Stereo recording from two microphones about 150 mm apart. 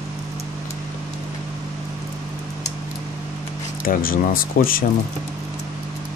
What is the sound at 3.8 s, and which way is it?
Speech, 70° left (ahead or behind).